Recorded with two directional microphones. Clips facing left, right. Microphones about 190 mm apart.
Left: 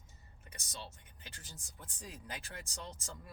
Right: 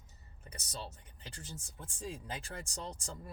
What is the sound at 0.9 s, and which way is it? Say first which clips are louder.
Speech: right 5 dB; 30° right (ahead or behind).